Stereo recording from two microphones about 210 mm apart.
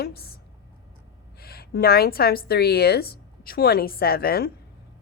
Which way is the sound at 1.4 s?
45° left (ahead or behind).